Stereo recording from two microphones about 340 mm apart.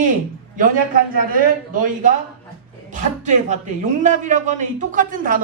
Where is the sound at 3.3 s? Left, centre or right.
Right.